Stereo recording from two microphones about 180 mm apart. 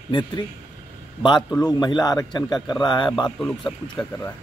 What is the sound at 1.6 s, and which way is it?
Speech, 20° left (ahead or behind).